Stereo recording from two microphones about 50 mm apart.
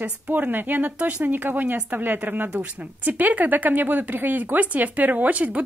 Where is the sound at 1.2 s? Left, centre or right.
Right.